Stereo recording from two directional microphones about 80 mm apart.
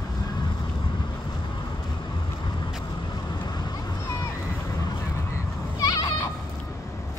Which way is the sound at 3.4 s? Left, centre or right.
Left.